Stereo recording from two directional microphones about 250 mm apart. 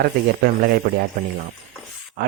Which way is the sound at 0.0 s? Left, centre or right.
Right.